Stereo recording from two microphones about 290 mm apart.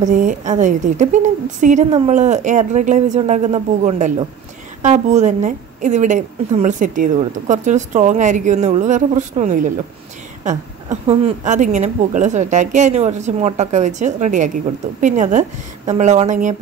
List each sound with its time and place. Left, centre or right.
0.0 s a woman's voice: right